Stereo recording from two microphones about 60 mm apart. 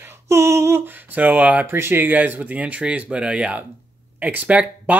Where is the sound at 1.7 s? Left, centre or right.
Right.